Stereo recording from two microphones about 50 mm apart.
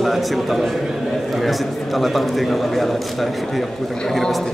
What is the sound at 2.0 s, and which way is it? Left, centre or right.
A man's voice, centre.